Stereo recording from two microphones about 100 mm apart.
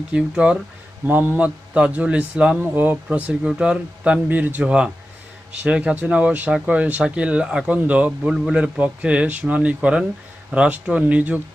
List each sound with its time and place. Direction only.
0.1 s speech: 10° right (ahead or behind)